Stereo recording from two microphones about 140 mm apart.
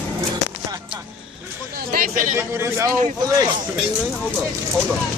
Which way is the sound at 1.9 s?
80° right.